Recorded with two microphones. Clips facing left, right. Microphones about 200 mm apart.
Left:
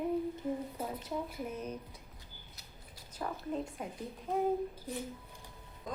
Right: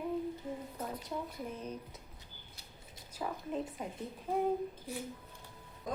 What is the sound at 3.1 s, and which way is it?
Speech, 5° right (ahead or behind).